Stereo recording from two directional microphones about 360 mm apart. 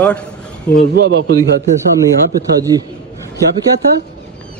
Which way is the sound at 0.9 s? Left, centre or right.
Right.